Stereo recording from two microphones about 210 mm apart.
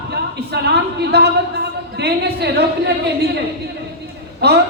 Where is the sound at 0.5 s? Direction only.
50° right (ahead or behind).